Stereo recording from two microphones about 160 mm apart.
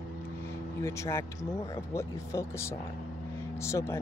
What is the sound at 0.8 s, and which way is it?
Speech, 15° left (ahead or behind).